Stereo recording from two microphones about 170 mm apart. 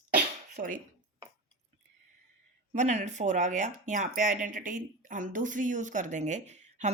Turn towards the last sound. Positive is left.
turn(degrees=-45)  # may be behind; listen again after turning